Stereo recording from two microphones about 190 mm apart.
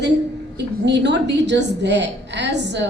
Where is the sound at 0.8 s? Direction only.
65° right (ahead or behind).